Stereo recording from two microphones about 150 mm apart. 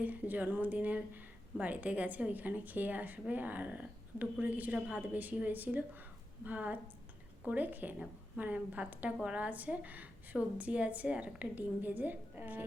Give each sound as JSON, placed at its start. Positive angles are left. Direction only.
{"t": 0.0, "sound": "speech", "side_deg": -10}